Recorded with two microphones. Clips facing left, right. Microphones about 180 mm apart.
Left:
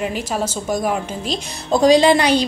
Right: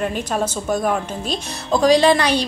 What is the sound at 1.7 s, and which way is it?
Speech, 20° left (ahead or behind).